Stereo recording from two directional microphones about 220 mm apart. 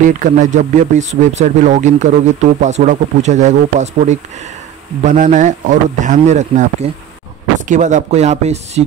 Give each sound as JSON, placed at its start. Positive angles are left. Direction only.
{"t": 0.0, "sound": "speech", "side_deg": -35}